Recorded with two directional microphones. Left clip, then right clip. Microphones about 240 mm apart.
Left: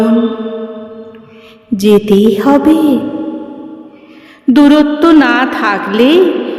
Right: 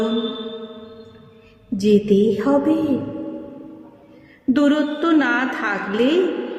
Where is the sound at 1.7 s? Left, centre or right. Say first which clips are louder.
Left 8 dB; left.